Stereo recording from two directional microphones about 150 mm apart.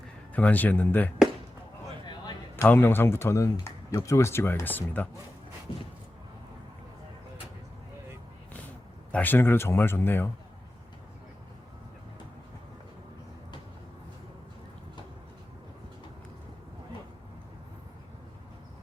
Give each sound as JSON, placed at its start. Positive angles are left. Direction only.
{"t": 0.3, "sound": "speech", "side_deg": 10}
{"t": 2.6, "sound": "speech", "side_deg": 15}
{"t": 9.1, "sound": "speech", "side_deg": 10}